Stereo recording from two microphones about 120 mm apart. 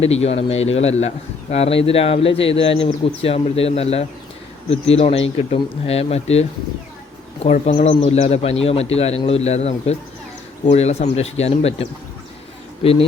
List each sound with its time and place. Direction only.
0.0 s a man's voice: 60° left (ahead or behind)
7.4 s a man's voice: 65° left (ahead or behind)